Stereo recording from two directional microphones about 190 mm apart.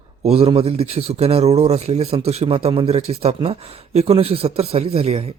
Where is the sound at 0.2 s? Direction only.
30° right (ahead or behind).